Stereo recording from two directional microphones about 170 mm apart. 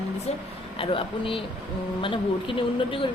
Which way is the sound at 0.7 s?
30° left (ahead or behind).